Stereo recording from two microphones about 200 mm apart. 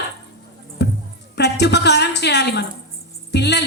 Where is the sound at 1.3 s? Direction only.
55° left (ahead or behind).